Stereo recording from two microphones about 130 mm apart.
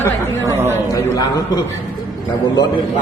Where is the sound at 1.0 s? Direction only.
30° left (ahead or behind).